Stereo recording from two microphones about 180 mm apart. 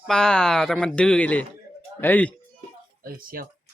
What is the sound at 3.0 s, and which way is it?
Speech, 55° right (ahead or behind).